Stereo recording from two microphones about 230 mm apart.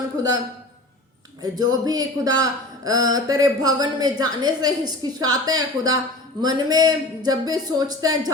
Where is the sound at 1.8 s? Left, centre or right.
Centre.